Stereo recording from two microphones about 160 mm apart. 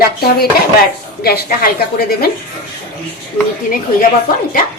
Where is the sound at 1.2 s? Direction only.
70° left (ahead or behind).